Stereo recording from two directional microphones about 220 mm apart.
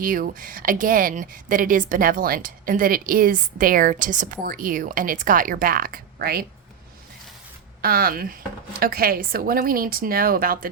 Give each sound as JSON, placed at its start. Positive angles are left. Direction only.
{"t": 0.0, "sound": "speech", "side_deg": -40}
{"t": 7.8, "sound": "speech", "side_deg": -40}